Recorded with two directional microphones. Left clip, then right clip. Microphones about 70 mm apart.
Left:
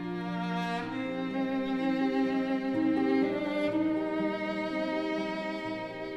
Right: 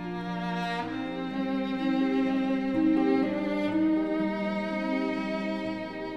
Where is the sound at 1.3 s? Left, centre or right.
Left.